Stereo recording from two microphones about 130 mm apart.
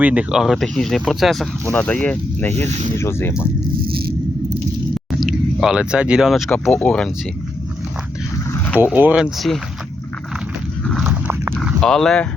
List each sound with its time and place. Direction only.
0.0 s speech: 10° right (ahead or behind)
1.7 s speech: 10° left (ahead or behind)
5.2 s speech: 5° right (ahead or behind)
6.5 s speech: 10° left (ahead or behind)
8.5 s a sound: 15° left (ahead or behind)
8.8 s speech: 15° right (ahead or behind)
9.2 s speech: centre (ahead or behind)
11.5 s speech: 5° left (ahead or behind)